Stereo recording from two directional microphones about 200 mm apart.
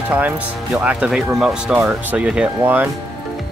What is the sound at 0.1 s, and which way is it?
Speech, 5° right (ahead or behind).